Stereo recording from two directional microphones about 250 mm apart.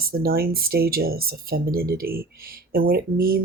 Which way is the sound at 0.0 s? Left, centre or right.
Right.